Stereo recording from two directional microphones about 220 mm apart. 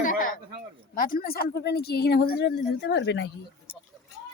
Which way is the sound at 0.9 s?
40° left (ahead or behind).